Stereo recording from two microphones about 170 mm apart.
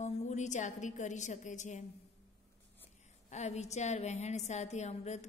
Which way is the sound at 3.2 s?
40° left (ahead or behind).